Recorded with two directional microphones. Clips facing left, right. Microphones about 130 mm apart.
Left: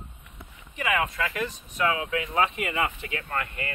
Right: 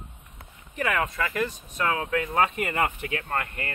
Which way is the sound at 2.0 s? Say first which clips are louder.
Right 1 dB; 40° right (ahead or behind).